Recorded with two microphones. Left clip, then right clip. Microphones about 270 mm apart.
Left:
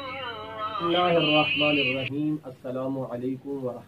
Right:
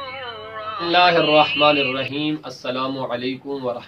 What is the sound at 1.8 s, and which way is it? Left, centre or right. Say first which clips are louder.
Speech: right 4 dB; right.